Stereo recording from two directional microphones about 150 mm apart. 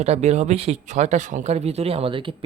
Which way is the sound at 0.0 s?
45° right (ahead or behind).